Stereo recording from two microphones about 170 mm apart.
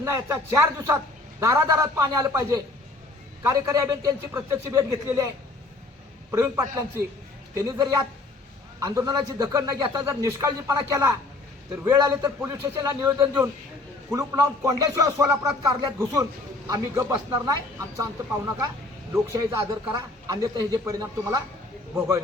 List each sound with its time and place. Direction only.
0.0 s a man's voice: 15° right (ahead or behind)
6.3 s a man's voice: 15° right (ahead or behind)
19.1 s a man's voice: 20° right (ahead or behind)